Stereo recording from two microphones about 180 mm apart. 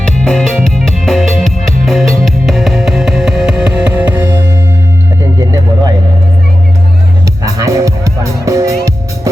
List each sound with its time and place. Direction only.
0.0 s music: 5° left (ahead or behind); by 4.4 s 15° right (ahead or behind)
5.4 s vehicle: 20° right (ahead or behind)
7.4 s music: 20° right (ahead or behind)